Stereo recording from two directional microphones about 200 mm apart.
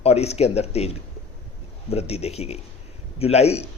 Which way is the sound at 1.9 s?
30° left (ahead or behind).